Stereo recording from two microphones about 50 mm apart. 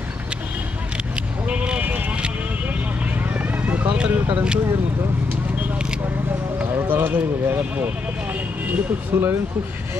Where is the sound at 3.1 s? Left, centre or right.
Right.